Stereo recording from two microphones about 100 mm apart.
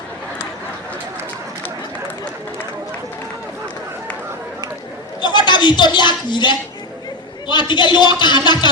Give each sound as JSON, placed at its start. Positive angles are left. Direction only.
{"t": 5.2, "sound": "a man's voice", "side_deg": 50}